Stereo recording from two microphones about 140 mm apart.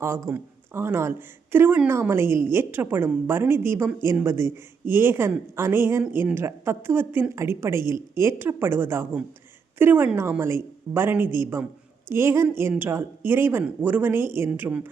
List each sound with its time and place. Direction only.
0.0 s a woman's voice: 15° right (ahead or behind)